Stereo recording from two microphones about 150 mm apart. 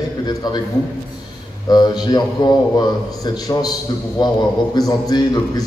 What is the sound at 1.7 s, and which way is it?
A man's voice, 25° left (ahead or behind).